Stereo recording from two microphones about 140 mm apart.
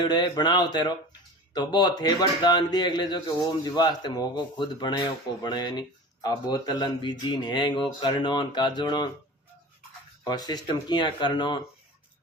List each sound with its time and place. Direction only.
0.0 s a man's voice: 30° left (ahead or behind)
10.2 s a man's voice: 30° left (ahead or behind)